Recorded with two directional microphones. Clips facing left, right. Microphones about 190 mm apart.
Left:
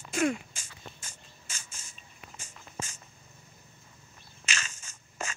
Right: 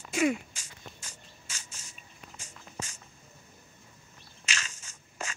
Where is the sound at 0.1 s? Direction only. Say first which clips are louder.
Right 1 dB; 5° right (ahead or behind).